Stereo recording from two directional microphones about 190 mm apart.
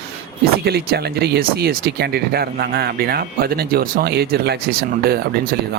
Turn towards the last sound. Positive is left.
turn(degrees=-50)  # may be behind; listen again after turning